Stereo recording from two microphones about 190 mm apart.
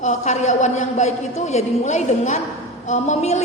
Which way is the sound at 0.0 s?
40° left (ahead or behind).